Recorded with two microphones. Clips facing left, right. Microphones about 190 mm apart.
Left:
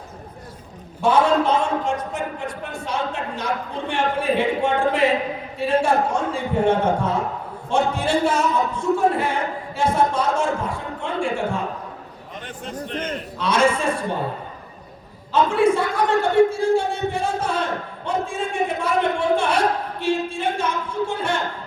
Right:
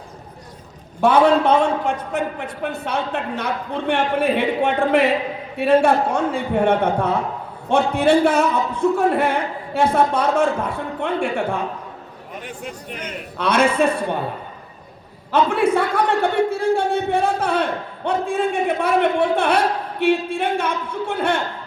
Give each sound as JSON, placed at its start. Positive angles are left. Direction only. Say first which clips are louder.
{"t": 1.0, "sound": "a man's voice", "louder": "right 3 dB", "side_deg": -60}
{"t": 2.6, "sound": "a man's voice", "louder": "right 4 dB", "side_deg": -60}
{"t": 12.5, "sound": "a man's voice", "louder": "left 4 dB", "side_deg": -10}
{"t": 13.4, "sound": "a man's voice", "louder": "right 3 dB", "side_deg": -60}
{"t": 15.3, "sound": "a man's voice", "louder": "even", "side_deg": -60}